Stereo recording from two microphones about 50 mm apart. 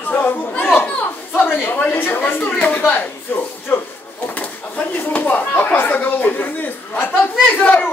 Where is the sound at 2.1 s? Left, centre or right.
Left.